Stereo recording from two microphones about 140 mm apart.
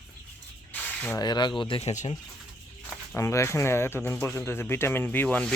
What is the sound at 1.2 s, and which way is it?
Speech, 30° left (ahead or behind).